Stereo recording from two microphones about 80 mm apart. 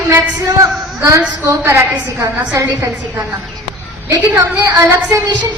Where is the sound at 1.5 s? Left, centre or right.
Right.